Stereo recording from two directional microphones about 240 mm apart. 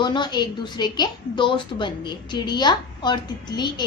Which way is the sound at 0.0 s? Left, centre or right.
Centre.